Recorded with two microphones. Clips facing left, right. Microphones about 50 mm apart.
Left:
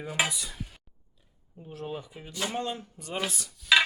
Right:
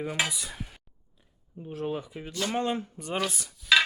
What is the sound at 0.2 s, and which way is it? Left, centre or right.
Stir, centre.